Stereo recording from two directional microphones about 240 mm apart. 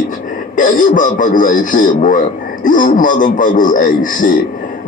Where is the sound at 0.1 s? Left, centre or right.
Left.